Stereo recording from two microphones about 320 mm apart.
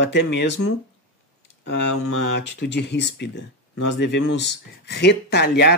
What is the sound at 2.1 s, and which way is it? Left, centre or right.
Speech, left.